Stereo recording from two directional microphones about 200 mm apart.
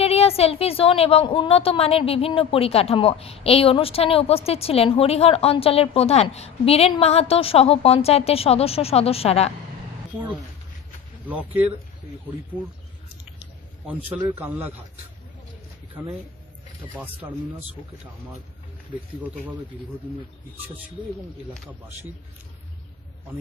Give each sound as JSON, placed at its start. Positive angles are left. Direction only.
{"t": 0.0, "sound": "a woman's voice", "side_deg": 30}
{"t": 11.3, "sound": "speech", "side_deg": -10}
{"t": 14.1, "sound": "speech", "side_deg": -20}
{"t": 14.3, "sound": "speech", "side_deg": -10}
{"t": 16.9, "sound": "speech", "side_deg": -10}